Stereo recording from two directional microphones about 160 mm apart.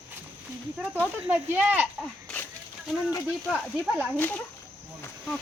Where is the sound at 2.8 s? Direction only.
Centre (ahead or behind).